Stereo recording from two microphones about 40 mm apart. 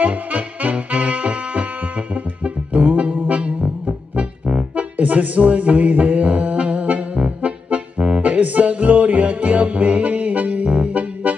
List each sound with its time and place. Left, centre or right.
0.0 s music: right